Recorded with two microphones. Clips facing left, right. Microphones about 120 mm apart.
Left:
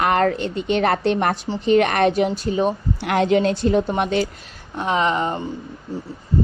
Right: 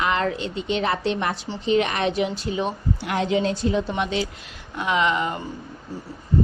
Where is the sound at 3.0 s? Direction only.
65° left (ahead or behind).